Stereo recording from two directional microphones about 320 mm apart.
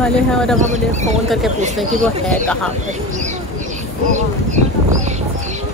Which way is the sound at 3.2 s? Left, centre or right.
Right.